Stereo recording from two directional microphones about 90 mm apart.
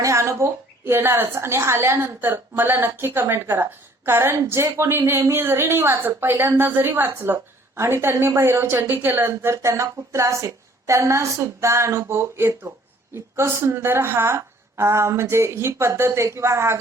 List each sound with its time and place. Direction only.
0.0 s a sound: 35° right (ahead or behind)
0.9 s a woman's voice: 25° right (ahead or behind)
6.3 s speech: 35° right (ahead or behind)
6.6 s a woman's voice: 25° right (ahead or behind)